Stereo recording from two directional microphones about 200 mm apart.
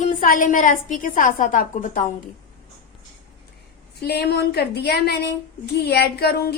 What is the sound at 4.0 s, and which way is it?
A woman's voice, 55° left (ahead or behind).